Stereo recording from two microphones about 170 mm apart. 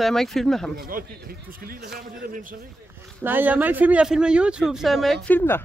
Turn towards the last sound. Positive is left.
turn(degrees=10)  # may be behind; listen again after turning